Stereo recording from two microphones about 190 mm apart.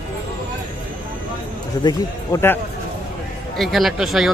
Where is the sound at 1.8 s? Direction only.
20° left (ahead or behind).